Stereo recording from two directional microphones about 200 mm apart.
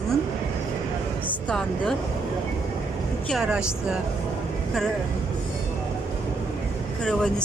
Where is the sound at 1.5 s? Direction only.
5° left (ahead or behind).